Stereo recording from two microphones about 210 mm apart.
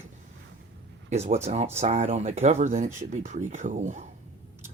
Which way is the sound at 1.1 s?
30° right (ahead or behind).